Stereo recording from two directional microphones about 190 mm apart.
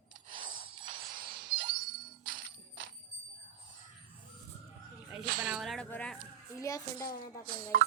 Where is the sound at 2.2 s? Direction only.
50° right (ahead or behind).